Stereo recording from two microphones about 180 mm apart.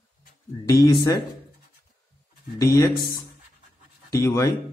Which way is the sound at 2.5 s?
15° left (ahead or behind).